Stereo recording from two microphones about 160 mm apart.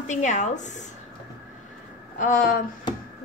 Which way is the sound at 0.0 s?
50° left (ahead or behind).